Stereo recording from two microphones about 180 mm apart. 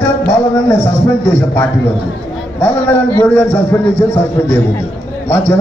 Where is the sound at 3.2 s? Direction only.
10° left (ahead or behind).